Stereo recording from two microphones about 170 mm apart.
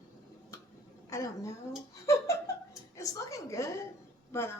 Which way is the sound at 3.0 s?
20° left (ahead or behind).